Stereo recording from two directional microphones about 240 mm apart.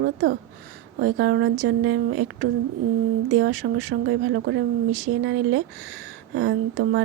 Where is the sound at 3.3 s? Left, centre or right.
Right.